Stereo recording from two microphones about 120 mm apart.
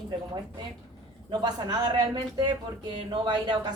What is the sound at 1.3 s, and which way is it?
A woman's voice, 40° right (ahead or behind).